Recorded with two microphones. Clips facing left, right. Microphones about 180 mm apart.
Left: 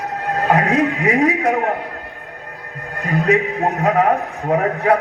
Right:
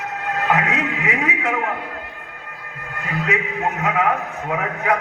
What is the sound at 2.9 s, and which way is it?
A man's voice, 35° left (ahead or behind).